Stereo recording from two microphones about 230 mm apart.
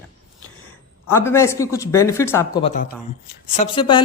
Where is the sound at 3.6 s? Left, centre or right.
Left.